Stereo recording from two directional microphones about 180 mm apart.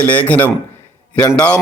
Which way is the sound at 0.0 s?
10° left (ahead or behind).